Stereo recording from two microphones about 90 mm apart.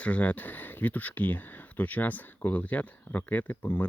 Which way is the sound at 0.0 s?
15° left (ahead or behind).